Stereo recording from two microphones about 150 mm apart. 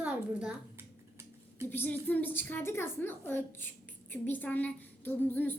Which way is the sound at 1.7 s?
10° left (ahead or behind).